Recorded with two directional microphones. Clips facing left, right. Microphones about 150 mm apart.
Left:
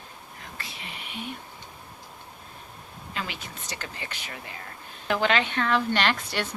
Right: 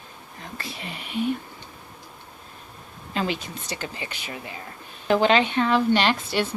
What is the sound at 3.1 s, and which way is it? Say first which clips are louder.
Speech: right 9 dB; 30° right (ahead or behind).